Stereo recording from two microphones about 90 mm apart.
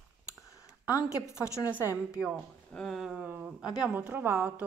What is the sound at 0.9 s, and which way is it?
Speech, 35° left (ahead or behind).